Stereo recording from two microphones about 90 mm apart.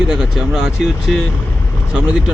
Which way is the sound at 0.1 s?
5° right (ahead or behind).